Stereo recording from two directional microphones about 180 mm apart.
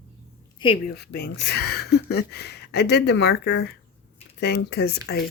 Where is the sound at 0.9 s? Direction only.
70° left (ahead or behind).